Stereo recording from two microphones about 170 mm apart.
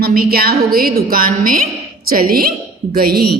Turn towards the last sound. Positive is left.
turn(degrees=-60)  # may be behind; listen again after turning